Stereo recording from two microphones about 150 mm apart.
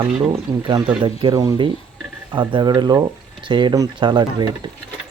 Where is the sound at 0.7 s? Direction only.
30° right (ahead or behind).